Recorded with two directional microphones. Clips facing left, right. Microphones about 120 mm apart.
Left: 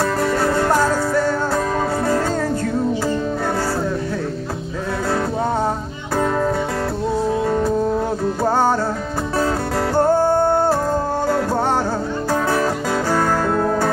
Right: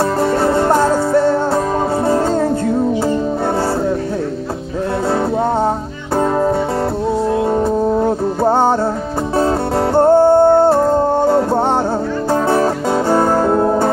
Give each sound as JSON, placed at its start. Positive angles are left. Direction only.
{"t": 0.2, "sound": "music", "side_deg": -25}
{"t": 8.5, "sound": "music", "side_deg": -25}
{"t": 9.9, "sound": "music", "side_deg": -25}